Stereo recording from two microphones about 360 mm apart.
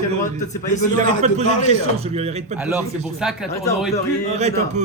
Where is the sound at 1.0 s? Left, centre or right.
Centre.